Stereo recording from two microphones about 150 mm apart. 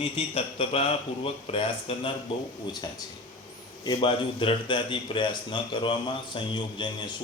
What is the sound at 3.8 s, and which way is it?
A man's voice, 30° left (ahead or behind).